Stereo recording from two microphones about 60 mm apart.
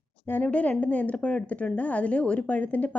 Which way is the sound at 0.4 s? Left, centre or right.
Left.